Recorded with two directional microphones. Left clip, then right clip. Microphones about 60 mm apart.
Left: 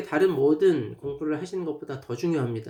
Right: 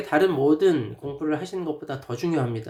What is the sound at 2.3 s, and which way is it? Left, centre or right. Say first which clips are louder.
Speech: right 2 dB; centre.